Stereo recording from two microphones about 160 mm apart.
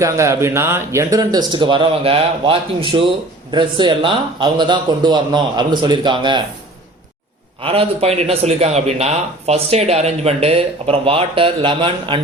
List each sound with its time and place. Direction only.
0.0 s speech: 20° right (ahead or behind)
7.6 s a man's voice: 35° right (ahead or behind)